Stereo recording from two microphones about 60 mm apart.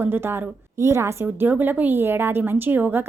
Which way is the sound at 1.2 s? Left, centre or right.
Right.